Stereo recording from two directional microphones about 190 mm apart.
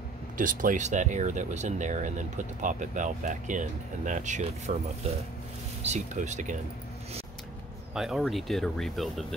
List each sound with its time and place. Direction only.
0.4 s speech: 45° right (ahead or behind)
5.8 s speech: 35° right (ahead or behind)
7.9 s speech: centre (ahead or behind)